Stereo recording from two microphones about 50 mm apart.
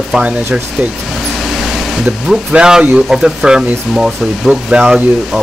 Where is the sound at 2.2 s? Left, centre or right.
Centre.